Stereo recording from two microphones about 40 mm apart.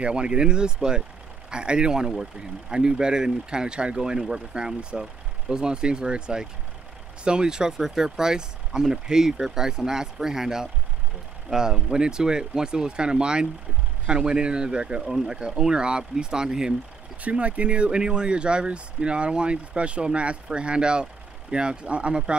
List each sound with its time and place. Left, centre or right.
0.0 s speech: right
15.0 s speech: centre
17.2 s speech: right